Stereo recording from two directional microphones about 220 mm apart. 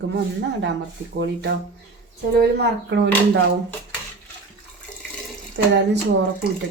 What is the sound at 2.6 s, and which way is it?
Speech, 50° right (ahead or behind).